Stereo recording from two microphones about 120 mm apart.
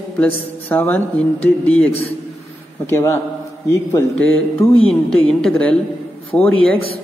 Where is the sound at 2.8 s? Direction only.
20° left (ahead or behind).